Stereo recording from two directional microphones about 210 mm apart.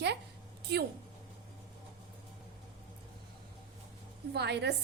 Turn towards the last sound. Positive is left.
turn(degrees=-55)  # may be behind; listen again after turning